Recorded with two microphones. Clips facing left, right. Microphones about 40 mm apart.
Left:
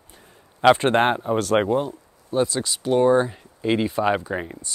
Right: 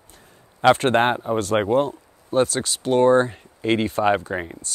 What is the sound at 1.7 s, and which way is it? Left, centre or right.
Speech, right.